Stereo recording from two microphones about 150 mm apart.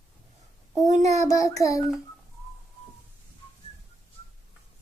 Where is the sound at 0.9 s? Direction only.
50° right (ahead or behind).